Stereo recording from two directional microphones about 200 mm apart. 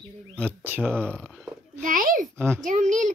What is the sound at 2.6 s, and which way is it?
Speech, 40° right (ahead or behind).